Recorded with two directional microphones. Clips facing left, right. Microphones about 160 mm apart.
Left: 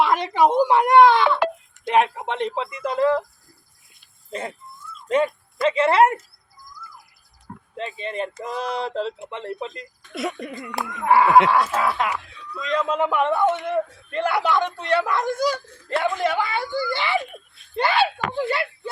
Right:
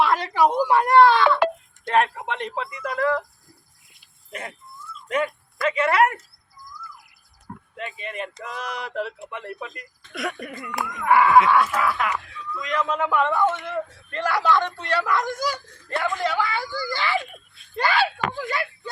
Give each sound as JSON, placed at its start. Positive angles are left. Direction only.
{"t": 0.0, "sound": "speech", "side_deg": 20}
{"t": 4.3, "sound": "speech", "side_deg": 30}
{"t": 7.8, "sound": "speech", "side_deg": 30}